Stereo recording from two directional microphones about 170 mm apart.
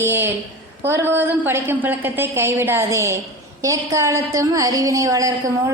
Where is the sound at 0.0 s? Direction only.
15° right (ahead or behind).